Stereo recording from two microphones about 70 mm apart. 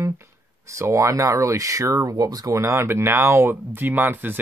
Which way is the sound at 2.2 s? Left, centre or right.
Right.